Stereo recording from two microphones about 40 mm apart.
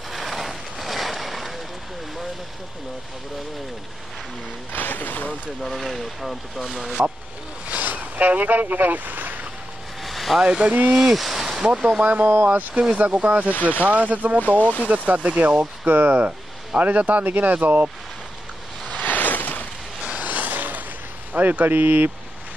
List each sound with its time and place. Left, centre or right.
0.1 s a sound: centre
4.7 s speech: left
5.6 s speech: centre
7.6 s a sound: right
10.0 s vehicle: centre
10.4 s speech: right
11.0 s speech: centre
11.6 s speech: right
12.0 s speech: right
14.6 s speech: left
14.9 s speech: right
18.9 s a sound: left
20.2 s a sound: right
21.3 s speech: right